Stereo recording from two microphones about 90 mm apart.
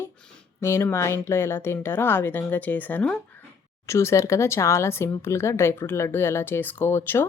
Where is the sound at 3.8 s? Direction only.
30° left (ahead or behind).